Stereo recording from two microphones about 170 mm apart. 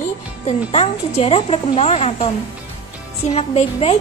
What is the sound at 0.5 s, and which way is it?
A woman's voice, 35° left (ahead or behind).